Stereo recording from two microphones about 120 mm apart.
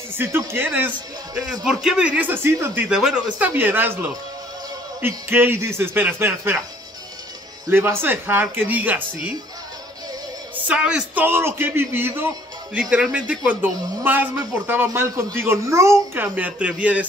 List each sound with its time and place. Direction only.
0.2 s speech: 20° right (ahead or behind)
1.5 s speech: 5° right (ahead or behind)
7.7 s speech: 20° right (ahead or behind)
10.5 s a woman's voice: 10° right (ahead or behind)
11.2 s speech: 20° right (ahead or behind)
14.9 s speech: 25° right (ahead or behind)
16.3 s speech: 10° right (ahead or behind)